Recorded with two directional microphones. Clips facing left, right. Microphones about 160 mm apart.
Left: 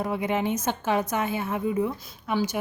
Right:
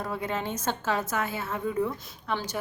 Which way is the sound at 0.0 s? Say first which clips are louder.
Left 5 dB; 15° left (ahead or behind).